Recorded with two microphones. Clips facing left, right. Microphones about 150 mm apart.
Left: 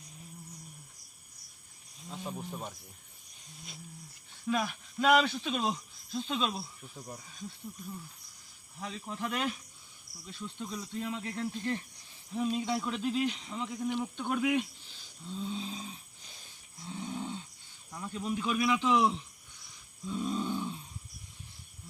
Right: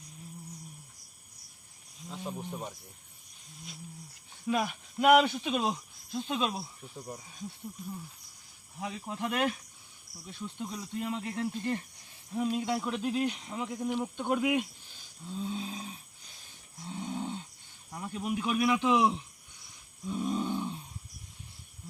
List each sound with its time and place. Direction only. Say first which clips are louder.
2.0 s speech: right 1 dB; centre (ahead or behind)
4.4 s speech: right 1 dB; 15° right (ahead or behind)
8.8 s speech: right 2 dB; 15° right (ahead or behind)
16.8 s a sound: right 2 dB; 20° right (ahead or behind)
17.9 s speech: right 1 dB; 15° right (ahead or behind)